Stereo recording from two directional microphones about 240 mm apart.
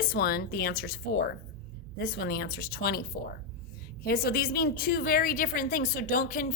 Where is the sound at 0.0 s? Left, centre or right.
Left.